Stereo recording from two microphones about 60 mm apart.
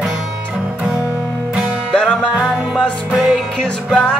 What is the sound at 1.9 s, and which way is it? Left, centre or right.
Music, centre.